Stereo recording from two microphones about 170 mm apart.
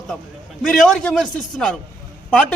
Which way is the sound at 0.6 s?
5° left (ahead or behind).